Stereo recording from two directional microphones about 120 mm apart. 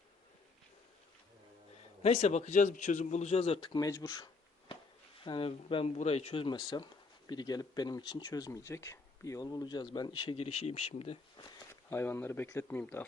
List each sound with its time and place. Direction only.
2.0 s a man's voice: 65° left (ahead or behind)
3.7 s speech: 30° left (ahead or behind)
4.7 s chop: 45° left (ahead or behind)
6.0 s speech: 60° left (ahead or behind); by 10.3 s 40° left (ahead or behind)
10.3 s speech: 55° left (ahead or behind)
11.7 s speech: 20° left (ahead or behind)